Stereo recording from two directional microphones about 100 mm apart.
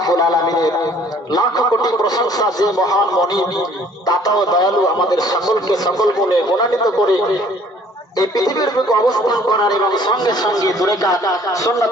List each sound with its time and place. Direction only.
0.0 s speech: 40° left (ahead or behind)
8.2 s speech: 40° left (ahead or behind)